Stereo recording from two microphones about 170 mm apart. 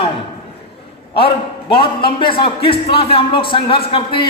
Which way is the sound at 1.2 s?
30° left (ahead or behind).